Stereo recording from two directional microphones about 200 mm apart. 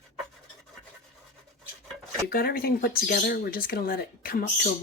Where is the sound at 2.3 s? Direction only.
50° left (ahead or behind).